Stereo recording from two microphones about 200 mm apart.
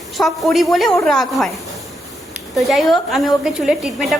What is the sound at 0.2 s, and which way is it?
A woman's voice, centre (ahead or behind).